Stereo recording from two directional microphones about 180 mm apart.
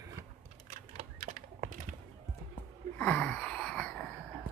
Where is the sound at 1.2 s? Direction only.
50° right (ahead or behind).